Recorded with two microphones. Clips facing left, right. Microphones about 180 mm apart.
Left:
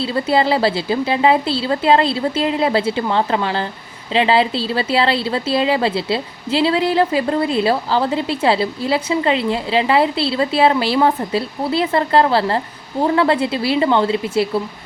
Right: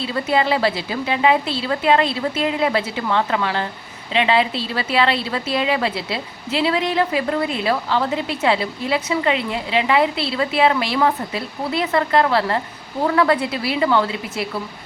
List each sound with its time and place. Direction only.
0.0 s a woman's voice: 30° left (ahead or behind)